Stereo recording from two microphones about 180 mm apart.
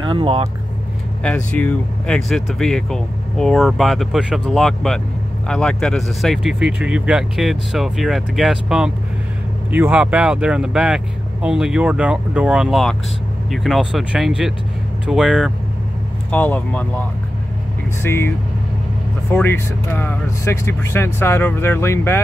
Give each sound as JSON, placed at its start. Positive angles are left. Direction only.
{"t": 0.1, "sound": "speech", "side_deg": -30}
{"t": 1.2, "sound": "speech", "side_deg": 5}
{"t": 16.3, "sound": "speech", "side_deg": 10}
{"t": 18.0, "sound": "speech", "side_deg": 15}
{"t": 19.3, "sound": "speech", "side_deg": 10}